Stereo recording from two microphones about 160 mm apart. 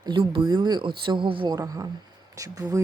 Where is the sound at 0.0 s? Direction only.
30° right (ahead or behind).